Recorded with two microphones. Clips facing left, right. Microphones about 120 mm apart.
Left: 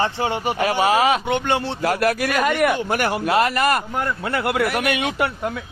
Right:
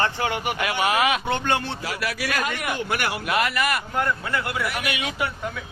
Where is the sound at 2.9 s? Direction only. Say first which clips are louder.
Left 5 dB; 40° left (ahead or behind).